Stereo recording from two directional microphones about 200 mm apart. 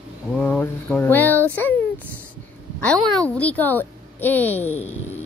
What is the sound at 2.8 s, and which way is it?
A woman's voice, 5° left (ahead or behind).